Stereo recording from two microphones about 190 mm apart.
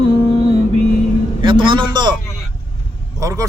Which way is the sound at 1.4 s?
25° right (ahead or behind).